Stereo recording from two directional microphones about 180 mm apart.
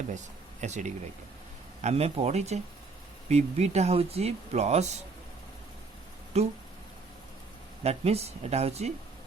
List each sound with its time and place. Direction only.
0.6 s speech: 40° right (ahead or behind)
6.3 s speech: 35° right (ahead or behind)
7.9 s speech: 35° right (ahead or behind)